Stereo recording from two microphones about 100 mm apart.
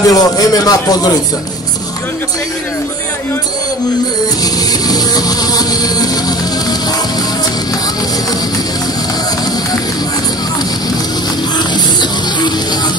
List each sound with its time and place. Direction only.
0.0 s speech: 40° left (ahead or behind)
4.8 s music: 40° left (ahead or behind)